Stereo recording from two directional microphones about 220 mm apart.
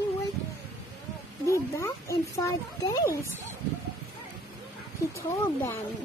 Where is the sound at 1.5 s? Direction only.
15° left (ahead or behind).